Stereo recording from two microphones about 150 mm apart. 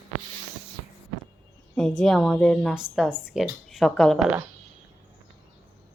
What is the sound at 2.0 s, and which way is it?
A woman's voice, centre (ahead or behind).